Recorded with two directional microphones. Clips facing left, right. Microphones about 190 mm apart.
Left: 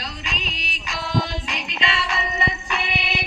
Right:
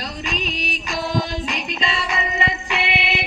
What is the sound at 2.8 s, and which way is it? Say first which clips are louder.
Music: right 5 dB; 65° right (ahead or behind).